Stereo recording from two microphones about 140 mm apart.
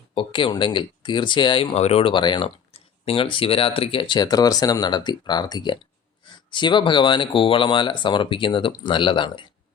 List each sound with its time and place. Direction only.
0.1 s speech: 35° left (ahead or behind)